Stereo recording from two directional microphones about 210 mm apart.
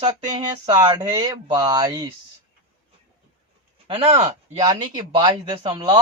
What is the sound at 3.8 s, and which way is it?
Speech, 25° right (ahead or behind).